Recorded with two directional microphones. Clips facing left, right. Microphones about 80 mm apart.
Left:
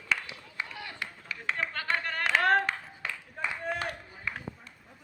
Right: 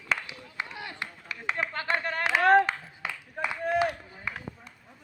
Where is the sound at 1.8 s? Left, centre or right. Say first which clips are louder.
Right 4 dB; right.